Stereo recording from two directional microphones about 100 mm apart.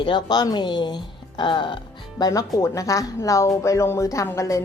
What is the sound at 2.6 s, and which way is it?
Speech, 30° left (ahead or behind).